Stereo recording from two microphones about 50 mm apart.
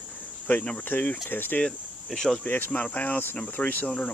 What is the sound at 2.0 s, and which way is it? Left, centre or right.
Speech, centre.